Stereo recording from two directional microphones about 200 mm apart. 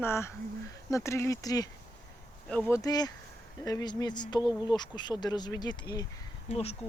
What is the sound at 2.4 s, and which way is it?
Speech, 10° left (ahead or behind).